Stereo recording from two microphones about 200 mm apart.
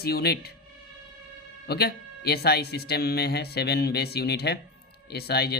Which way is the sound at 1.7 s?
50° left (ahead or behind).